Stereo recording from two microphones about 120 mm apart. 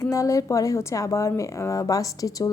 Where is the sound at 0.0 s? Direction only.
25° left (ahead or behind).